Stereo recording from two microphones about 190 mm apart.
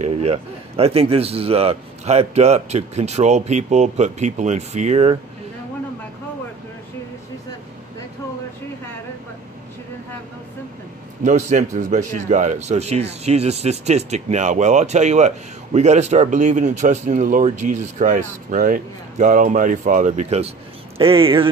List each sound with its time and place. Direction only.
0.0 s speech: 35° right (ahead or behind)
11.2 s speech: 40° right (ahead or behind)